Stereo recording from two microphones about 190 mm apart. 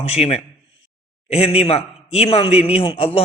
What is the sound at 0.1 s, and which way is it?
A man's voice, 35° left (ahead or behind).